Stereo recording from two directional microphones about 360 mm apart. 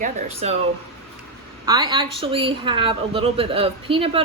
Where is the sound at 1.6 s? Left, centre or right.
Centre.